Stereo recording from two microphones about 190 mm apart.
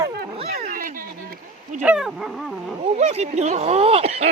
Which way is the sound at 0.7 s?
45° right (ahead or behind).